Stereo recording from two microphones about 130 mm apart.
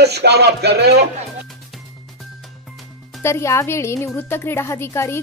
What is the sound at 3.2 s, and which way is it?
Speech, 20° left (ahead or behind).